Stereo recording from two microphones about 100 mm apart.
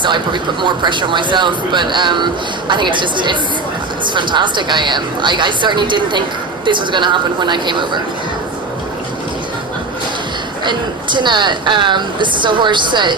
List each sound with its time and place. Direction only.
0.0 s speech: 50° right (ahead or behind)
10.6 s speech: 50° right (ahead or behind)